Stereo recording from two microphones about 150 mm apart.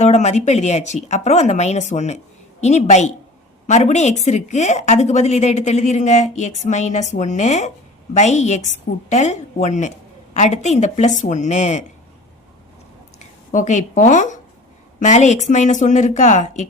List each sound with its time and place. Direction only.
0.0 s a woman's voice: 50° left (ahead or behind)
13.5 s a woman's voice: 55° left (ahead or behind)